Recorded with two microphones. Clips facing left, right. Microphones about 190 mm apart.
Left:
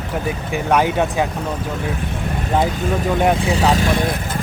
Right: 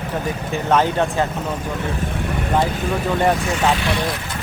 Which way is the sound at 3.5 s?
35° left (ahead or behind).